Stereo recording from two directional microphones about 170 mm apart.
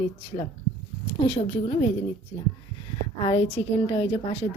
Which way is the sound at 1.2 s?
35° left (ahead or behind).